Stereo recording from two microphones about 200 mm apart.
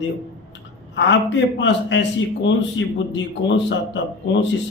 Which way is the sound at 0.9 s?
65° left (ahead or behind).